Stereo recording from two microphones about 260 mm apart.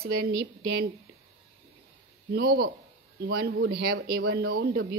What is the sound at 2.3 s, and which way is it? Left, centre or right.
A woman's voice, right.